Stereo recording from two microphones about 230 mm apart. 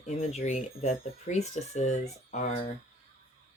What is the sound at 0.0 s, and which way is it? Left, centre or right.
Speech, left.